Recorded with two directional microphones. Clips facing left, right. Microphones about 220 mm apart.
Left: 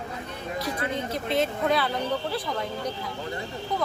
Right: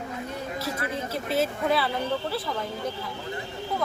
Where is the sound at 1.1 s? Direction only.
5° right (ahead or behind).